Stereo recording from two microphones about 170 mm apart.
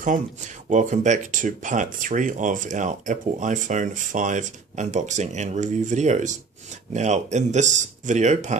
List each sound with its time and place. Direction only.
0.0 s speech: 45° right (ahead or behind)